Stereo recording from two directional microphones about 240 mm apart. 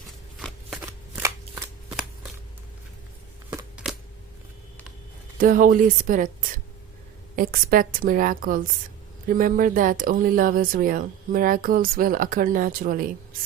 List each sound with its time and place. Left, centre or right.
0.3 s shuffling cards: centre
3.5 s a sound: centre
5.4 s speech: right